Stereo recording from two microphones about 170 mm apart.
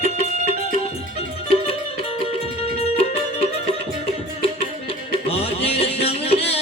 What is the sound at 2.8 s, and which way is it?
Music, 35° left (ahead or behind).